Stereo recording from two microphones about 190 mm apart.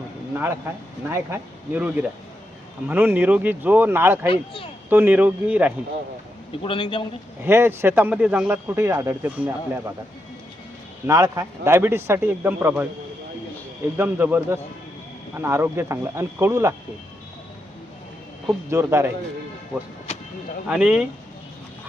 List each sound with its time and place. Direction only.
1.1 s speech: 10° right (ahead or behind)
4.3 s a man's voice: 25° left (ahead or behind)
4.9 s speech: 10° right (ahead or behind)
6.6 s a man's voice: 25° left (ahead or behind)
7.4 s speech: 10° right (ahead or behind)
11.0 s speech: 15° right (ahead or behind)
13.9 s speech: 10° right (ahead or behind)
18.4 s speech: 15° right (ahead or behind)
20.1 s vehicle: 30° left (ahead or behind)
20.7 s speech: 5° right (ahead or behind)